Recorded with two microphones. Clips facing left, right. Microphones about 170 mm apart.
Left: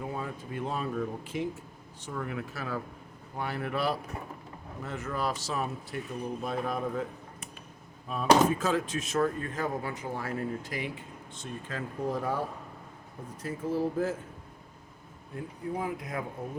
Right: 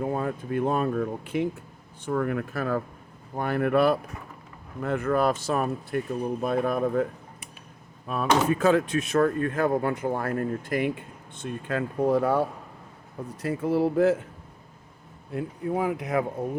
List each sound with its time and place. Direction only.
0.0 s speech: 55° right (ahead or behind); by 14.2 s 70° right (ahead or behind)
15.3 s speech: 75° right (ahead or behind)